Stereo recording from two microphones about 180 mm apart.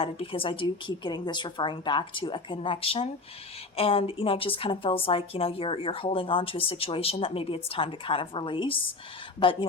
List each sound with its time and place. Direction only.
0.0 s a woman's voice: 30° left (ahead or behind)